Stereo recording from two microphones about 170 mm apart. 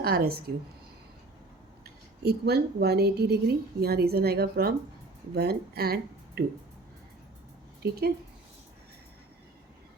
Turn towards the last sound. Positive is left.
turn(degrees=-70)  # may be behind; listen again after turning